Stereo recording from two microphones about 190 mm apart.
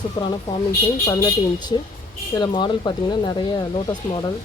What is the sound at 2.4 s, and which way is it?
Speech, 25° left (ahead or behind).